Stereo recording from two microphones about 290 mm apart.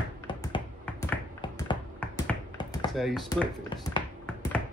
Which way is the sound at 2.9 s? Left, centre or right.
Centre.